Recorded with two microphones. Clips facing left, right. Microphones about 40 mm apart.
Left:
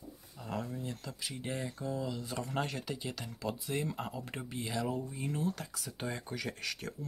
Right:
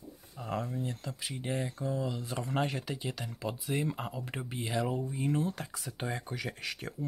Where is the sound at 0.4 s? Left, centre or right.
Centre.